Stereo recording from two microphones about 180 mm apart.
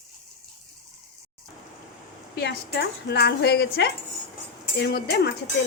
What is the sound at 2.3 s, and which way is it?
A woman's voice, 60° left (ahead or behind).